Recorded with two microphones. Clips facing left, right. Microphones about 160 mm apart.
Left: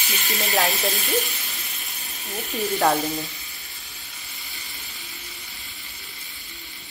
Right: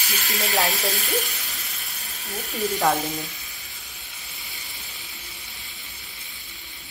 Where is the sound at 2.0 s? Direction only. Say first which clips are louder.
Left 1 dB; 20° left (ahead or behind).